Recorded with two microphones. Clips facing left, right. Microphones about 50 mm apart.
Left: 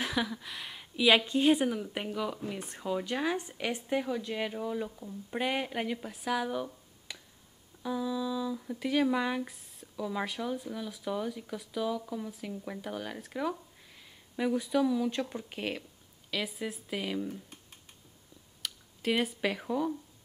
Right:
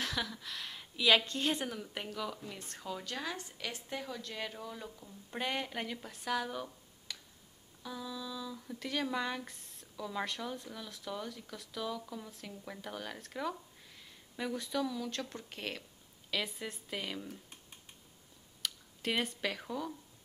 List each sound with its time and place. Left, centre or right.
0.0 s speech: centre